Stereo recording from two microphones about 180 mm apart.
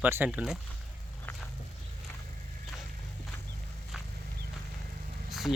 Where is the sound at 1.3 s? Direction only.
10° left (ahead or behind).